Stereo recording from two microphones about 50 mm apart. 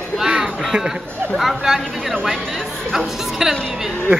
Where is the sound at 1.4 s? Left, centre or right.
Centre.